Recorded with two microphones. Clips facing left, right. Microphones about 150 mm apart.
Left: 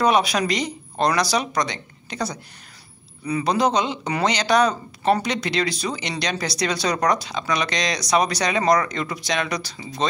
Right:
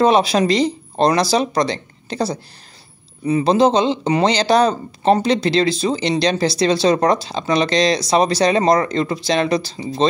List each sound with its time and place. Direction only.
0.0 s speech: 30° right (ahead or behind)